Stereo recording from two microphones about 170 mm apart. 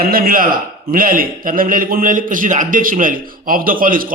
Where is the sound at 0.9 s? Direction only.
55° right (ahead or behind).